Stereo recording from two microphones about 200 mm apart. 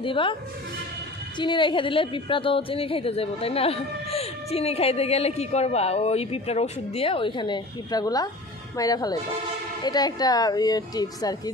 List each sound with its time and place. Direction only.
0.0 s a woman's voice: 25° left (ahead or behind)
1.4 s a woman's voice: 25° left (ahead or behind)